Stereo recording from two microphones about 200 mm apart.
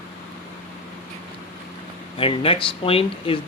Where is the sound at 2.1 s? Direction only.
25° left (ahead or behind).